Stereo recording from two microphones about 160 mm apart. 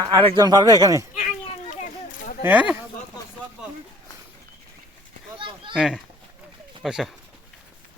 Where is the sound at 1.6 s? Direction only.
55° left (ahead or behind).